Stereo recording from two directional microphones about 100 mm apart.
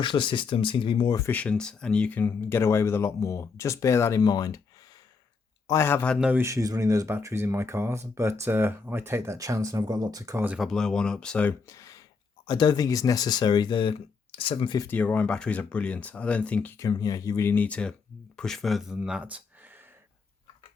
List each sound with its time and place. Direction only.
0.0 s speech: 55° left (ahead or behind)
1.3 s speech: 15° left (ahead or behind)
4.2 s speech: 40° left (ahead or behind)
5.6 s speech: 30° left (ahead or behind)
6.3 s speech: 30° right (ahead or behind)
10.6 s speech: 5° left (ahead or behind)
11.7 s a sound: 35° left (ahead or behind)
12.5 s speech: 45° left (ahead or behind)
14.3 s speech: 65° left (ahead or behind)
14.8 s speech: 15° left (ahead or behind)
16.7 s speech: 35° left (ahead or behind)
17.4 s speech: 20° left (ahead or behind); by 19.4 s 10° right (ahead or behind)